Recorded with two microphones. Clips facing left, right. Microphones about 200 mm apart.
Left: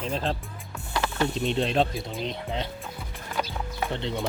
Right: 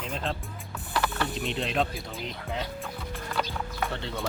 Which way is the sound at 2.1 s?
20° left (ahead or behind).